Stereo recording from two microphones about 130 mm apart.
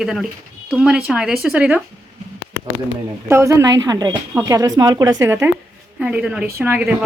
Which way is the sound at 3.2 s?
20° right (ahead or behind).